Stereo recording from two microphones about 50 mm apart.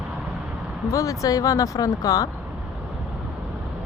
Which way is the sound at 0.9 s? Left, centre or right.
Left.